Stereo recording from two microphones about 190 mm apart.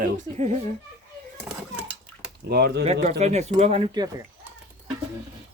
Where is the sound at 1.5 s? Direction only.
5° right (ahead or behind).